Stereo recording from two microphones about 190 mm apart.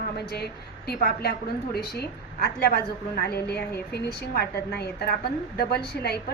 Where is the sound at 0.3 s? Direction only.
55° left (ahead or behind).